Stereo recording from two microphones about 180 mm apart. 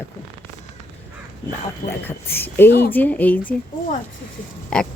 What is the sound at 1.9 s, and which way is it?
Speech, 10° left (ahead or behind).